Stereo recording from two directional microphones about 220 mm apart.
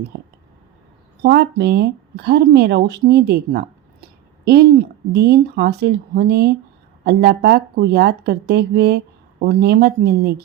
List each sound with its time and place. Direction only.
0.1 s speech: 50° right (ahead or behind)